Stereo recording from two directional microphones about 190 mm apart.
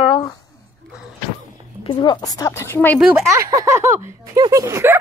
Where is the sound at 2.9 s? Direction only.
Centre (ahead or behind).